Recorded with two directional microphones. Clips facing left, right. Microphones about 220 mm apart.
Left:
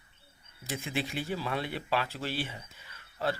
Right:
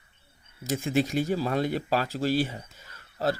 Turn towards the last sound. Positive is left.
turn(degrees=-40)  # may be behind; listen again after turning